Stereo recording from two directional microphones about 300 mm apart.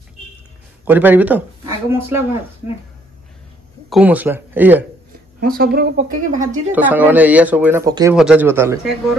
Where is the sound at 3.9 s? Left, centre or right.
Centre.